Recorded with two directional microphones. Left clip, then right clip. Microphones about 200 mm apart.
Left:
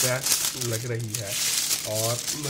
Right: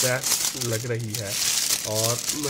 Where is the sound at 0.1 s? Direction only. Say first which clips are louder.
Right 1 dB; 20° right (ahead or behind).